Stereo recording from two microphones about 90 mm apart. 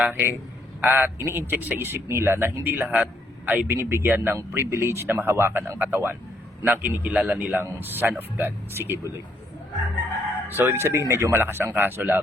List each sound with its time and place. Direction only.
0.0 s a man's voice: 20° right (ahead or behind)
10.5 s a man's voice: 25° right (ahead or behind)